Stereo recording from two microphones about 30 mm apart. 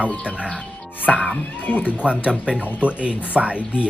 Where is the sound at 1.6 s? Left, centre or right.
Left.